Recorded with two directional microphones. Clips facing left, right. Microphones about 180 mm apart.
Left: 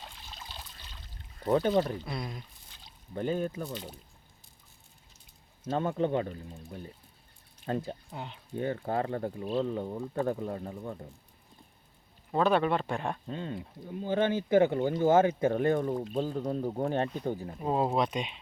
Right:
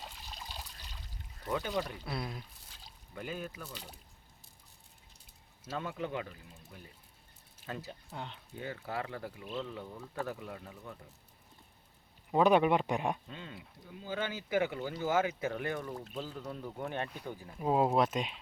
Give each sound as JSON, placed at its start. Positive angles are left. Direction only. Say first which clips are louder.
{"t": 0.0, "sound": "trickle", "louder": "even", "side_deg": -5}
{"t": 1.5, "sound": "speech", "louder": "left 9 dB", "side_deg": 40}
{"t": 2.0, "sound": "speech", "louder": "left 2 dB", "side_deg": -5}
{"t": 3.1, "sound": "speech", "louder": "left 10 dB", "side_deg": 35}
{"t": 5.6, "sound": "speech", "louder": "left 9 dB", "side_deg": 30}
{"t": 7.6, "sound": "speech", "louder": "left 10 dB", "side_deg": 45}
{"t": 8.1, "sound": "speech", "louder": "left 2 dB", "side_deg": 5}
{"t": 8.6, "sound": "speech", "louder": "left 8 dB", "side_deg": 50}
{"t": 12.3, "sound": "speech", "louder": "even", "side_deg": -15}
{"t": 13.2, "sound": "speech", "louder": "left 10 dB", "side_deg": 40}
{"t": 14.8, "sound": "speech", "louder": "left 10 dB", "side_deg": 50}
{"t": 15.1, "sound": "speech", "louder": "left 6 dB", "side_deg": 30}
{"t": 17.6, "sound": "speech", "louder": "right 1 dB", "side_deg": -5}